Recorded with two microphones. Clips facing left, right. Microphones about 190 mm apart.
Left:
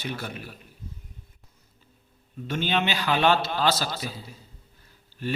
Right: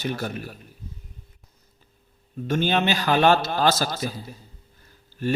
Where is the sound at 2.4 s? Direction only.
45° right (ahead or behind).